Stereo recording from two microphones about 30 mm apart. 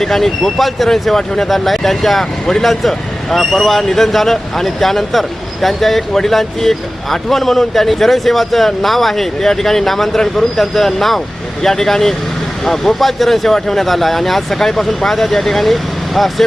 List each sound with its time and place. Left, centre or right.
0.0 s speech: centre